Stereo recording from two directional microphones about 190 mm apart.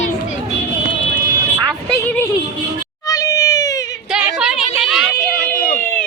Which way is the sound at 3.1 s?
20° left (ahead or behind).